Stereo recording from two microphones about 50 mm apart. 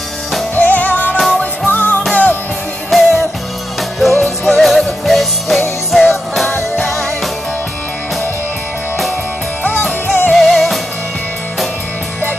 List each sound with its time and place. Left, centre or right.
0.6 s music: left
1.1 s music: centre
1.7 s music: left
2.9 s music: centre
9.6 s music: left
10.3 s music: centre